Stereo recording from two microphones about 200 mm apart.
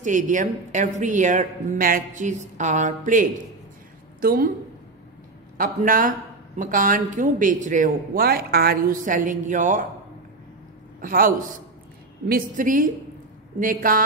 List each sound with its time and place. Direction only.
0.0 s a woman's voice: 40° right (ahead or behind)
5.6 s speech: 45° right (ahead or behind)
11.0 s a man's voice: 45° right (ahead or behind)